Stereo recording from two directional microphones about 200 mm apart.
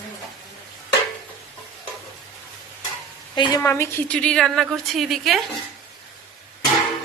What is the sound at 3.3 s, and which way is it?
Speech, 25° left (ahead or behind).